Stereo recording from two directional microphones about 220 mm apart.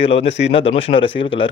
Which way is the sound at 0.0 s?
25° left (ahead or behind).